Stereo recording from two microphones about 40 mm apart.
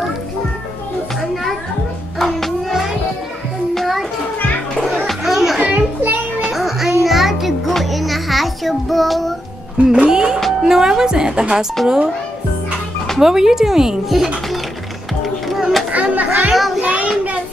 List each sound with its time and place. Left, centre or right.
2.1 s music: centre
5.2 s music: centre
5.6 s children playing: right
6.5 s music: centre
9.9 s music: centre
10.6 s a woman's voice: centre
11.8 s speech: centre
13.2 s speech: centre
15.9 s music: right
16.5 s child singing: centre
16.8 s child singing: right